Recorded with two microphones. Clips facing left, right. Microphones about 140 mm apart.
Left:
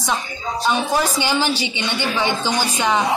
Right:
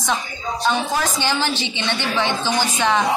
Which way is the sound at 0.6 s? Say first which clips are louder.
Left 2 dB; 10° left (ahead or behind).